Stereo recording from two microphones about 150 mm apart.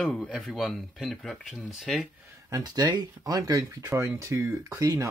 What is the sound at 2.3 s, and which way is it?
Speech, 25° right (ahead or behind).